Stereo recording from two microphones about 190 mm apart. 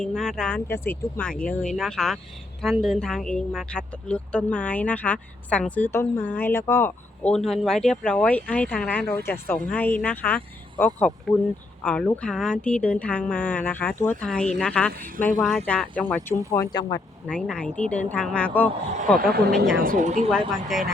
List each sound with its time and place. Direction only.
0.0 s speech: 5° left (ahead or behind)
14.9 s speech: 45° right (ahead or behind)
15.4 s speech: centre (ahead or behind); by 17.0 s 20° left (ahead or behind)
17.2 s speech: 5° left (ahead or behind)
19.3 s speech: 60° right (ahead or behind)
19.7 s speech: 50° right (ahead or behind)
20.7 s speech: centre (ahead or behind)